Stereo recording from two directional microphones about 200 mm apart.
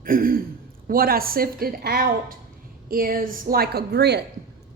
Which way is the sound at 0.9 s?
45° right (ahead or behind).